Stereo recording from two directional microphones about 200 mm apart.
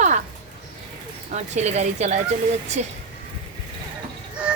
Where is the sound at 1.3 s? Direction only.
35° right (ahead or behind).